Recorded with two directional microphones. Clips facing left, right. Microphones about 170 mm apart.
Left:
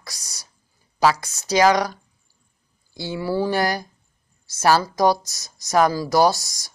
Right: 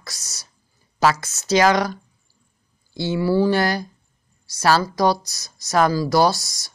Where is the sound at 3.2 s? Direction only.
20° left (ahead or behind).